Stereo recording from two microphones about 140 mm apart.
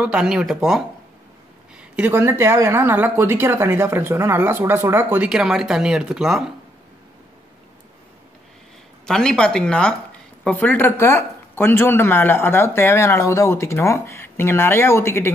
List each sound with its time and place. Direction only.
0.0 s speech: 5° right (ahead or behind)
9.0 s speech: 5° left (ahead or behind)